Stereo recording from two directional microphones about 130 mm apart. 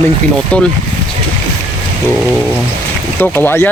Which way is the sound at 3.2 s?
15° left (ahead or behind).